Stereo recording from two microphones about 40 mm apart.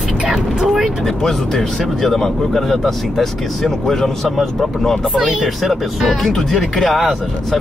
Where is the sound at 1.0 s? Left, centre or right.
Centre.